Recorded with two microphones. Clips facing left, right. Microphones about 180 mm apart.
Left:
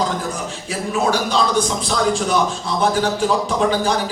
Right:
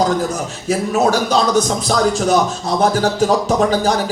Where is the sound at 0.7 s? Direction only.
45° right (ahead or behind).